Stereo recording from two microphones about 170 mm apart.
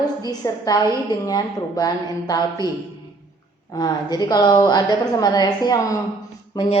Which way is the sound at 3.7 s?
20° left (ahead or behind).